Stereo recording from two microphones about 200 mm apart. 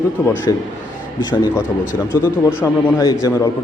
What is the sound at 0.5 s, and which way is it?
A man's voice, 20° left (ahead or behind).